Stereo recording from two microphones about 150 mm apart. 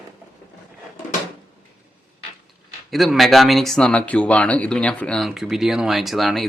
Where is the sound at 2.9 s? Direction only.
Centre (ahead or behind).